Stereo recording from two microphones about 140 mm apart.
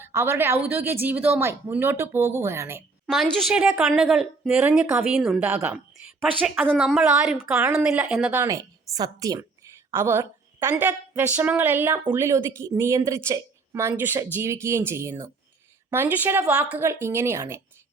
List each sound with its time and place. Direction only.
0.0 s a woman's voice: 20° right (ahead or behind)
3.1 s speech: centre (ahead or behind)
8.4 s a woman's voice: 25° right (ahead or behind)